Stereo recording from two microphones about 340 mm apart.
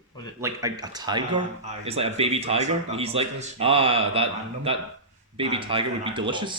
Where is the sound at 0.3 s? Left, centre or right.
Centre.